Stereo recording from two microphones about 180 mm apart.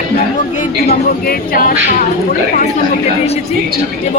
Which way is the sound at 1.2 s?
55° left (ahead or behind).